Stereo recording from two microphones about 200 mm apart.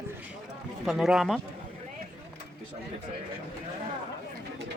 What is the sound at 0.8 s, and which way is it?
Speech, centre (ahead or behind).